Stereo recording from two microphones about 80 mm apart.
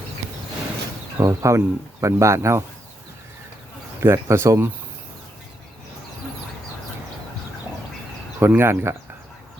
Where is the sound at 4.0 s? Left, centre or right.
Right.